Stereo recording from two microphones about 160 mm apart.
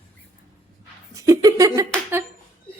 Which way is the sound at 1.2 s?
20° right (ahead or behind).